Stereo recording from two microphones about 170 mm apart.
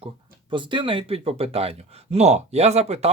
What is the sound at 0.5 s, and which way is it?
Speech, 30° right (ahead or behind).